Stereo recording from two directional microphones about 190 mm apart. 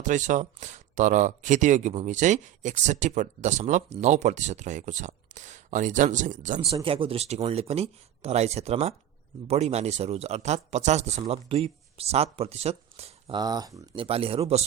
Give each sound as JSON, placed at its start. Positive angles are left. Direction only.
{"t": 0.0, "sound": "speech", "side_deg": -40}
{"t": 6.8, "sound": "speech", "side_deg": -30}